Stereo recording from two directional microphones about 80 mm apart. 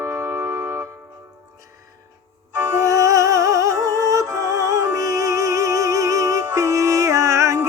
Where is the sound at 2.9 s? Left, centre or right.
Right.